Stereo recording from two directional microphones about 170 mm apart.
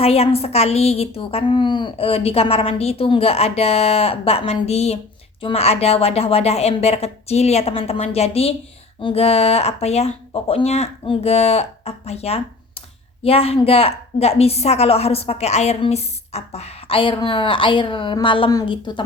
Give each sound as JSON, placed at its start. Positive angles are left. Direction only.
{"t": 0.0, "sound": "a woman's voice", "side_deg": 35}